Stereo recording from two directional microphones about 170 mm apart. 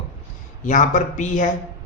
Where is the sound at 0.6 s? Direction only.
45° left (ahead or behind).